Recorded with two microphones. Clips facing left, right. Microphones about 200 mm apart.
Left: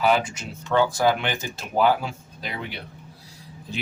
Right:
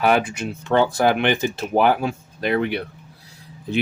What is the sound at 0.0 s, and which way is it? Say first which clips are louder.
Speech: right 3 dB; 60° right (ahead or behind).